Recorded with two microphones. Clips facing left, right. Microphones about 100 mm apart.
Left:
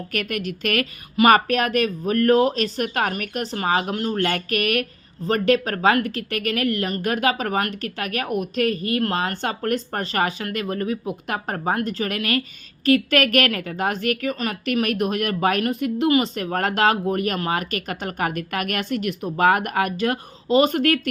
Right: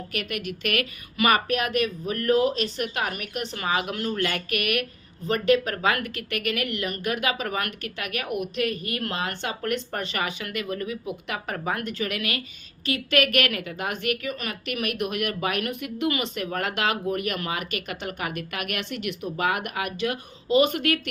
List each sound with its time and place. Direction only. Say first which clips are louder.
0.1 s speech: left 5 dB; 45° left (ahead or behind); by 4.1 s 30° left (ahead or behind)
4.1 s speech: left 5 dB; 45° left (ahead or behind)